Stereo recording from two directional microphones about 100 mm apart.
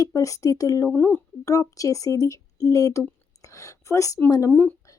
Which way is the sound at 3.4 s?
30° left (ahead or behind).